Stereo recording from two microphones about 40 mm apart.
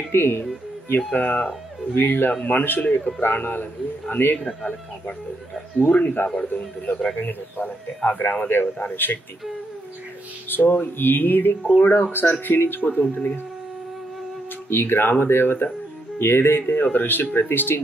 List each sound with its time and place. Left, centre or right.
0.1 s speech: left
0.8 s speech: left
5.8 s speech: left
7.2 s speech: left
7.6 s speech: left
8.2 s speech: left
10.5 s speech: left
11.8 s speech: left
12.1 s speech: left
14.7 s speech: left
16.2 s speech: left